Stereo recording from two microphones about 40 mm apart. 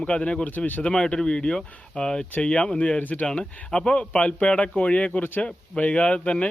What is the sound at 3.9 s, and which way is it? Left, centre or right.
Speech, left.